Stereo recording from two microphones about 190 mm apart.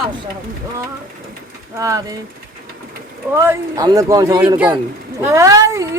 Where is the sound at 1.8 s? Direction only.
15° right (ahead or behind).